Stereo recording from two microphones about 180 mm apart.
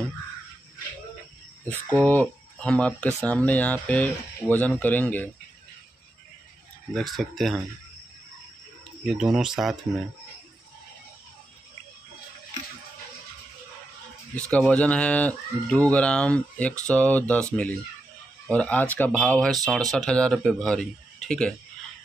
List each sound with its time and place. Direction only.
1.7 s speech: 10° left (ahead or behind)
6.9 s speech: centre (ahead or behind)
9.0 s speech: centre (ahead or behind)
14.3 s speech: 5° left (ahead or behind)
18.5 s speech: 5° left (ahead or behind)